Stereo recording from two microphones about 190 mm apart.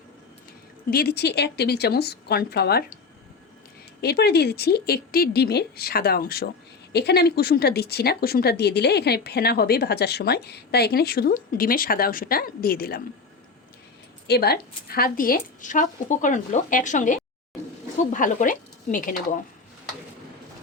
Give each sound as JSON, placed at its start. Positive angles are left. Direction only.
{"t": 0.9, "sound": "speech", "side_deg": 55}
{"t": 4.0, "sound": "speech", "side_deg": 60}
{"t": 14.3, "sound": "a woman's voice", "side_deg": 55}